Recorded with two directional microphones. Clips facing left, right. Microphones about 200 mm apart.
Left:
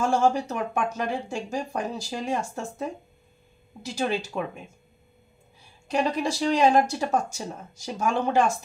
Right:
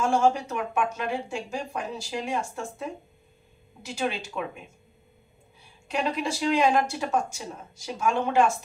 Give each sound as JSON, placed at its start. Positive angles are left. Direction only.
{"t": 0.0, "sound": "speech", "side_deg": 35}
{"t": 5.9, "sound": "speech", "side_deg": 35}